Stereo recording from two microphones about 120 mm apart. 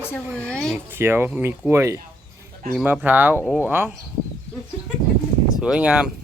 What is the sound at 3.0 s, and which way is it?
Speech, 15° right (ahead or behind).